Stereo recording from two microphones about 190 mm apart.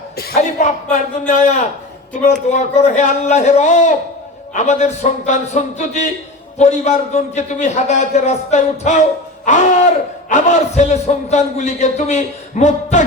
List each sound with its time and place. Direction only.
0.3 s a man's voice: 40° left (ahead or behind)